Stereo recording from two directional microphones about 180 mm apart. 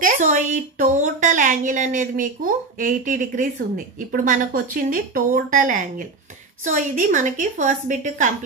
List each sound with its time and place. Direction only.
0.0 s a woman's voice: 45° right (ahead or behind)